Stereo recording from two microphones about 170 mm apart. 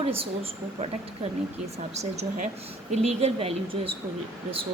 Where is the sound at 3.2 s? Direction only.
35° right (ahead or behind).